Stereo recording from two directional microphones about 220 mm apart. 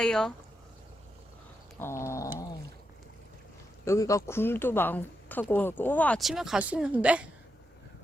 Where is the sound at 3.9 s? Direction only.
15° left (ahead or behind); by 7.3 s 5° right (ahead or behind).